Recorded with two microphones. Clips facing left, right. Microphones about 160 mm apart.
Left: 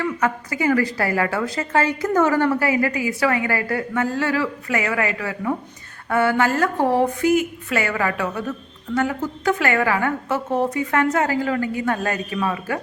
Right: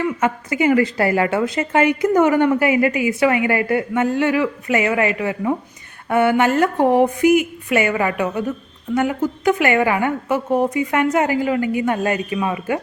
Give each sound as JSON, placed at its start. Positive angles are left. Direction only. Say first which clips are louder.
{"t": 0.0, "sound": "a woman's voice", "louder": "right 2 dB", "side_deg": -20}